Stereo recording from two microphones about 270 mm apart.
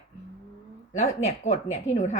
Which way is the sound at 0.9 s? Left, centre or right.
Left.